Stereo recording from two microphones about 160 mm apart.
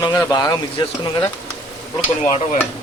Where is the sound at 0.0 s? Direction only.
25° left (ahead or behind).